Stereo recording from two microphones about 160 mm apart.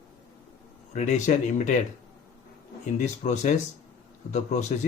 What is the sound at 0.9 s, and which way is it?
Speech, 50° left (ahead or behind).